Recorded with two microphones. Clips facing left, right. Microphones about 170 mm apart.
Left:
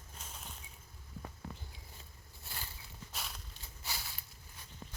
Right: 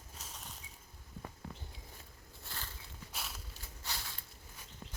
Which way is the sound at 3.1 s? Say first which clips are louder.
Even; centre (ahead or behind).